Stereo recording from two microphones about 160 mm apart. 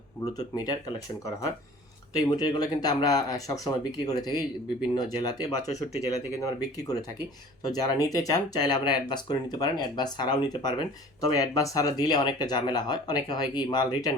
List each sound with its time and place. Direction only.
0.3 s speech: 25° left (ahead or behind)